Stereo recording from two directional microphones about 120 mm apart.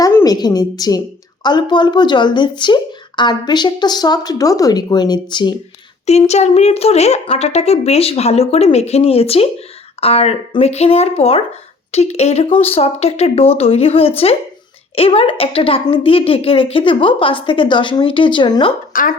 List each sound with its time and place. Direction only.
0.3 s speech: 35° left (ahead or behind)
6.1 s a woman's voice: 65° left (ahead or behind); by 18.7 s 40° left (ahead or behind)